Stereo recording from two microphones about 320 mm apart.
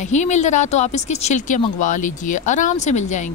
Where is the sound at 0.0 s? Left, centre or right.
Left.